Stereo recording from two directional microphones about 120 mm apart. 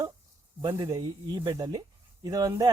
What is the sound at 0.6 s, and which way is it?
Speech, 35° right (ahead or behind).